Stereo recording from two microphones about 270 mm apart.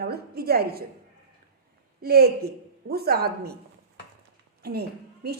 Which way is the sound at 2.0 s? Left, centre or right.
Right.